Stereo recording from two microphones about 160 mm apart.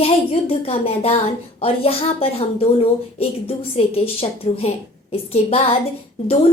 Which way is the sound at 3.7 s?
35° left (ahead or behind).